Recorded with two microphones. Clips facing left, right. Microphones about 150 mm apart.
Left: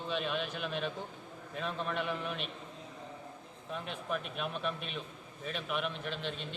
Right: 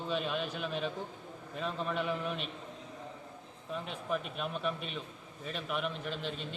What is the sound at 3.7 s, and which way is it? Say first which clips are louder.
A man's voice: right 2 dB; centre (ahead or behind).